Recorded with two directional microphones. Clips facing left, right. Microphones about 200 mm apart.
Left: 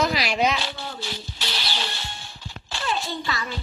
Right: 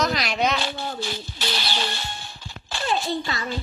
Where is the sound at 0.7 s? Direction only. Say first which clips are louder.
Right 4 dB; 50° right (ahead or behind).